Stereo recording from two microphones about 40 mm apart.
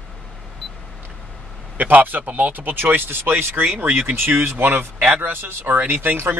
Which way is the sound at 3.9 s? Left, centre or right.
Right.